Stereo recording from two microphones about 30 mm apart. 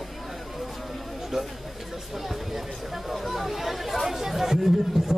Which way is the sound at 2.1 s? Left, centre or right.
Centre.